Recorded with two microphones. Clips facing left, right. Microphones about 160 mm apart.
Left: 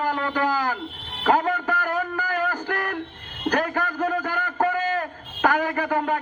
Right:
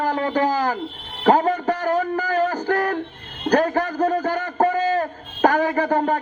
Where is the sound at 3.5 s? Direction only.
40° right (ahead or behind).